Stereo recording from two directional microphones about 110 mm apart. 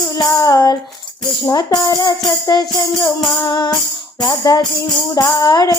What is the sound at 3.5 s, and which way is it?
Music, 45° left (ahead or behind).